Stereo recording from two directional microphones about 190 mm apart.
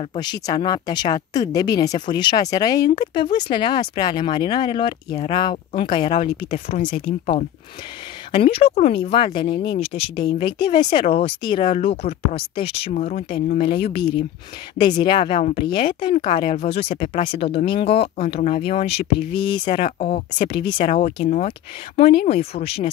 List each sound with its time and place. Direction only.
0.1 s speech: 20° left (ahead or behind)
19.1 s speech: 60° left (ahead or behind)
19.5 s speech: 25° left (ahead or behind)
20.7 s speech: 40° left (ahead or behind)